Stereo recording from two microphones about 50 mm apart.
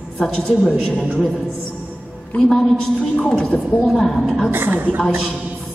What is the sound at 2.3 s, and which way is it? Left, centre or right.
A woman's voice, centre.